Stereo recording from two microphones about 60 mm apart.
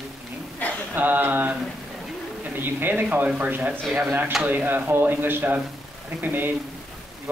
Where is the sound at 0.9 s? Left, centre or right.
Right.